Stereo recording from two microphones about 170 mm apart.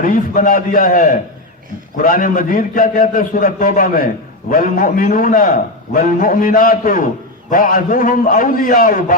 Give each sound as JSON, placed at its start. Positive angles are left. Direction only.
{"t": 0.0, "sound": "a man's voice", "side_deg": 55}